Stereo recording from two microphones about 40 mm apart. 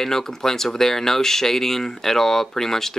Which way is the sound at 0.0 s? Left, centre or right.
Centre.